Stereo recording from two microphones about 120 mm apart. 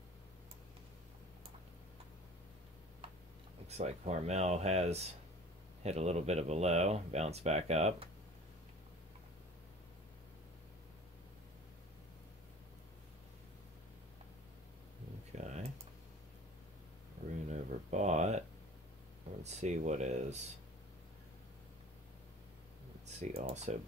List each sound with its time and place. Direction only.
3.6 s speech: 65° right (ahead or behind)
15.4 s computer keyboard: 70° right (ahead or behind)
17.5 s speech: 75° right (ahead or behind)
19.4 s speech: 70° right (ahead or behind)
23.0 s speech: 65° right (ahead or behind)